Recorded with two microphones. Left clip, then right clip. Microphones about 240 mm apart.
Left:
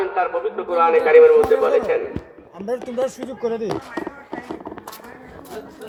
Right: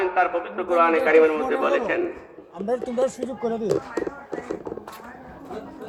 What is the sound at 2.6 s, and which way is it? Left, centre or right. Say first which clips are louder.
Speech: even; centre.